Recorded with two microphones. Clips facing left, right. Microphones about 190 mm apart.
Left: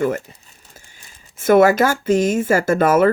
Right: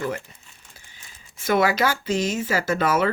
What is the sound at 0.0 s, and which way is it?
Crumpling, 45° left (ahead or behind).